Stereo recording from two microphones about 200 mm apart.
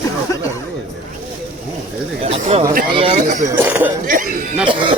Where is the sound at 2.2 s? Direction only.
30° right (ahead or behind).